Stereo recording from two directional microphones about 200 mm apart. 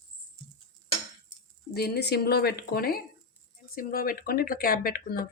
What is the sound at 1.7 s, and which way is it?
Speech, 55° left (ahead or behind).